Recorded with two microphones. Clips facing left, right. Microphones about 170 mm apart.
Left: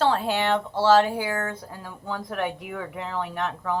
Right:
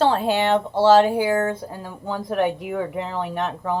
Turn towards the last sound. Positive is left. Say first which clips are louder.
# right 3 dB
turn(degrees=-25)  # may be behind; listen again after turning